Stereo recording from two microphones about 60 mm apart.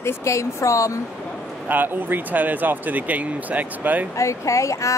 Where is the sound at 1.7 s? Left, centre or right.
Right.